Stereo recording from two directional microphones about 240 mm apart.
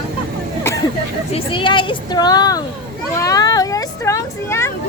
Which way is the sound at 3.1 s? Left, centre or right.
Centre.